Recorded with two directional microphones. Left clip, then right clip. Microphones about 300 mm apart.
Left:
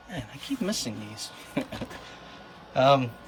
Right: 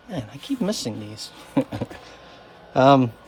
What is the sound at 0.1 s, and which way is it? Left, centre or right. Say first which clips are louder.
Speech: right 5 dB; centre.